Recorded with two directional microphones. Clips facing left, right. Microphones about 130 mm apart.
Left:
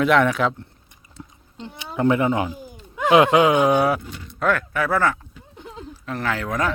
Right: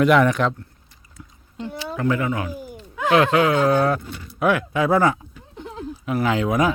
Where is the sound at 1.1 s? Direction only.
25° left (ahead or behind).